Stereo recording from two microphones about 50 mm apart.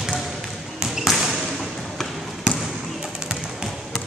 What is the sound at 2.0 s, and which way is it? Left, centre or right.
Trickle, centre.